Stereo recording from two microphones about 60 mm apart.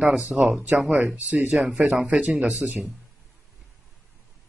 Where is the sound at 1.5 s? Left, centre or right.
Centre.